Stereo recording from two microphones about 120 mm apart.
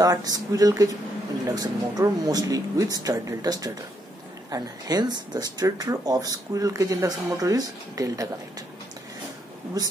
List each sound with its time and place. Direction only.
0.0 s speech: 30° right (ahead or behind)